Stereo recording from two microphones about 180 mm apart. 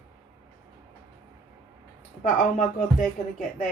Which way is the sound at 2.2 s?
45° left (ahead or behind).